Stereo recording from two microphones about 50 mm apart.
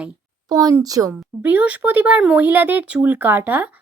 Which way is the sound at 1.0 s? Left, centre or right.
Right.